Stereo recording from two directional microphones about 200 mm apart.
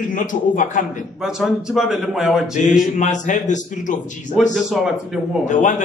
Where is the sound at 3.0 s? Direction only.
40° left (ahead or behind).